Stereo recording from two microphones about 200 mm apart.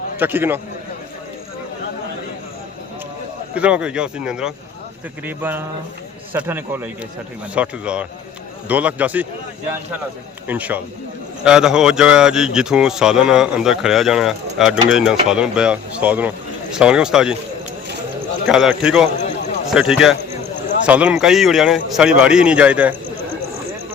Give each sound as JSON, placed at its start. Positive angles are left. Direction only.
{"t": 0.2, "sound": "a man's voice", "side_deg": -10}
{"t": 3.5, "sound": "a man's voice", "side_deg": -5}
{"t": 10.4, "sound": "a man's voice", "side_deg": -10}
{"t": 18.4, "sound": "speech", "side_deg": -5}